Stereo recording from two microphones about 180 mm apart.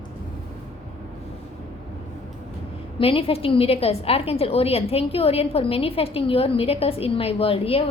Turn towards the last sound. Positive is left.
turn(degrees=30)  # may be behind; listen again after turning